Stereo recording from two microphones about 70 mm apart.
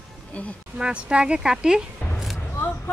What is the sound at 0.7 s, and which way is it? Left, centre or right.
Speech, centre.